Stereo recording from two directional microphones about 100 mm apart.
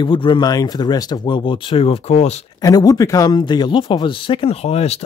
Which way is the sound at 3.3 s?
50° left (ahead or behind).